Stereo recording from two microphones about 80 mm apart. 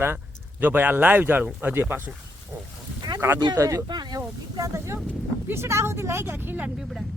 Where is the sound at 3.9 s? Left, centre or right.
Right.